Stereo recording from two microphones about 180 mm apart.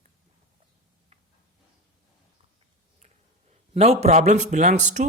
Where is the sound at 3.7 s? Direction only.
35° right (ahead or behind).